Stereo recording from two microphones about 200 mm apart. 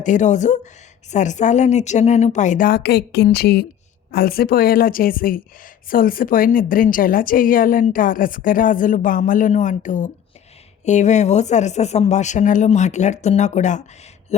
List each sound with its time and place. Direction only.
0.0 s a woman's voice: 40° left (ahead or behind)